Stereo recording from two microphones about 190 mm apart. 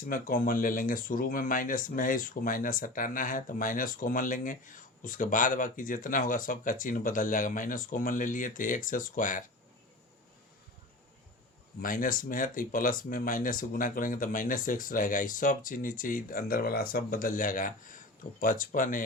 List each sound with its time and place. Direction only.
0.0 s speech: 45° left (ahead or behind)
11.8 s speech: 45° left (ahead or behind)